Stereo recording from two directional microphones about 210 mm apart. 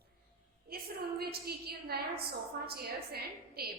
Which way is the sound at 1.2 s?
45° right (ahead or behind).